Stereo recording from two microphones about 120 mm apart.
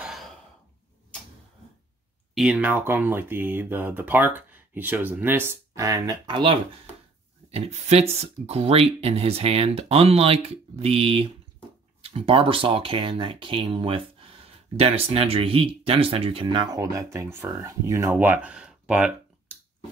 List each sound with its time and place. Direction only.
2.3 s speech: 10° right (ahead or behind); by 6.1 s 30° right (ahead or behind)
6.2 s speech: 45° right (ahead or behind)
7.5 s speech: 60° right (ahead or behind)
16.6 s speech: 30° right (ahead or behind); by 19.5 s 10° right (ahead or behind)